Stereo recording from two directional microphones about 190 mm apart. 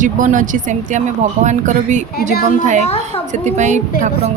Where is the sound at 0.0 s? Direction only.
45° right (ahead or behind).